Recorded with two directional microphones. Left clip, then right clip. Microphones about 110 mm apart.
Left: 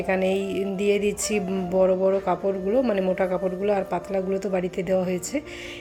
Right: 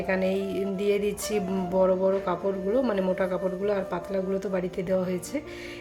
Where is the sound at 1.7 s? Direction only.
20° left (ahead or behind).